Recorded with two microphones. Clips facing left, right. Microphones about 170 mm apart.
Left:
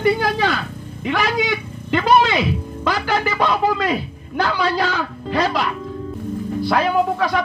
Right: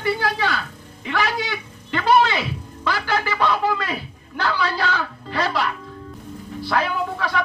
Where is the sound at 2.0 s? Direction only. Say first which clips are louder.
Left 1 dB; 15° left (ahead or behind).